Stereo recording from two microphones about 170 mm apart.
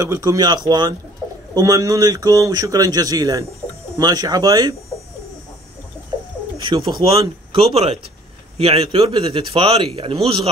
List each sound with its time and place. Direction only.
0.0 s a man's voice: 20° right (ahead or behind)
7.1 s a man's voice: 35° right (ahead or behind)